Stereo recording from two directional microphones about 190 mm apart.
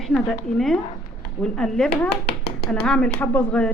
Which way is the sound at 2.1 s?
60° left (ahead or behind).